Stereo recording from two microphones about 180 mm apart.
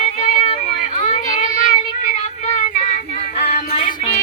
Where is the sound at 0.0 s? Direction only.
35° left (ahead or behind).